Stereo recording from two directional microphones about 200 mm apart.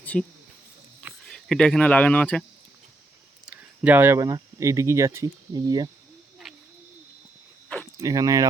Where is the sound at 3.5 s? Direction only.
10° right (ahead or behind).